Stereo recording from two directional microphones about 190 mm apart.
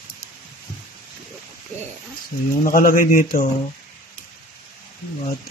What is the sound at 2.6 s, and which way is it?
Speech, 45° left (ahead or behind).